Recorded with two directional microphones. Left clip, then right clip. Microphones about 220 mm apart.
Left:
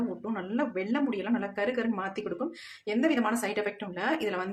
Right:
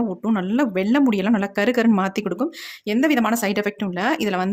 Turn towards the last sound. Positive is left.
turn(degrees=-45)  # may be behind; listen again after turning